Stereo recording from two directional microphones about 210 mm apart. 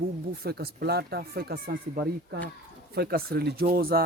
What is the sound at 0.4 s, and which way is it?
Speech, 50° right (ahead or behind).